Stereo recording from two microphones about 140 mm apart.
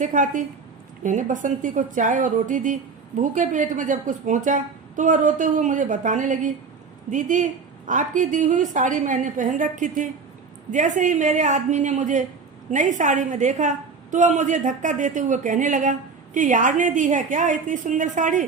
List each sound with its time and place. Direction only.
0.0 s speech: 65° right (ahead or behind)